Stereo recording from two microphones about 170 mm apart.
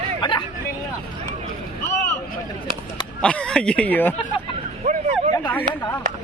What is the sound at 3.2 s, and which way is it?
Speech, 5° left (ahead or behind).